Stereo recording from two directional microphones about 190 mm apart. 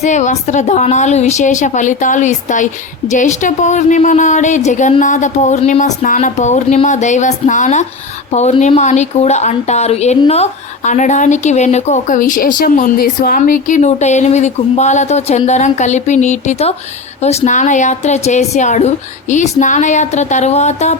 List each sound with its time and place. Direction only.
0.0 s speech: 40° left (ahead or behind)